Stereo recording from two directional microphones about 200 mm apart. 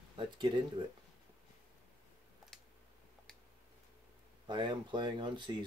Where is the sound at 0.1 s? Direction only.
25° right (ahead or behind).